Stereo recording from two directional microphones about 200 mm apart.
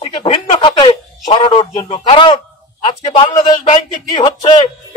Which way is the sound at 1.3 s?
25° left (ahead or behind).